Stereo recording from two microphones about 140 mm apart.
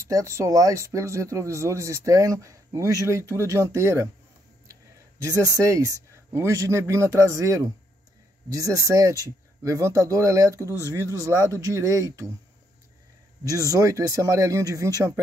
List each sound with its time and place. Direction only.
0.0 s speech: 20° right (ahead or behind)
5.5 s speech: 25° right (ahead or behind)
13.7 s speech: 25° right (ahead or behind)